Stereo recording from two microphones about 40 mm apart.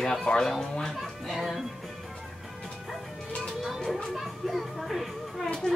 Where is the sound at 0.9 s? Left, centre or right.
Centre.